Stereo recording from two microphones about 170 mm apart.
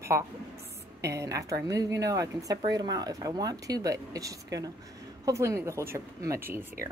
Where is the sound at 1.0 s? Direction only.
20° right (ahead or behind).